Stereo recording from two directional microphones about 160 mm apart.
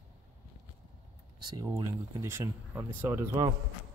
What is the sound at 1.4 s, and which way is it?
Speech, 25° right (ahead or behind).